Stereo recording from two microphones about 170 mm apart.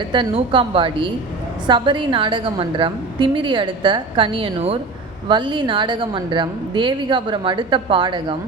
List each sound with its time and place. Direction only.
0.1 s a woman's voice: 30° right (ahead or behind)